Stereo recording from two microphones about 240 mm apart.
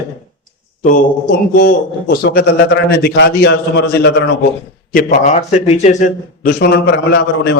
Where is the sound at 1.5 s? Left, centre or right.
Left.